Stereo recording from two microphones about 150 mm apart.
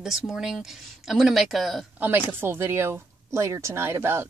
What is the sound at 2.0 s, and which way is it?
Speech, 15° right (ahead or behind).